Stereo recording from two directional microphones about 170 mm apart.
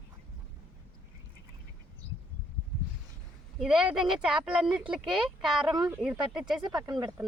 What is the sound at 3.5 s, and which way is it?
Speech, 5° right (ahead or behind).